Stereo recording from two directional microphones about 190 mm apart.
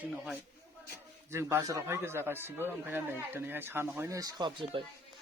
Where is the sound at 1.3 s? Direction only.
15° right (ahead or behind).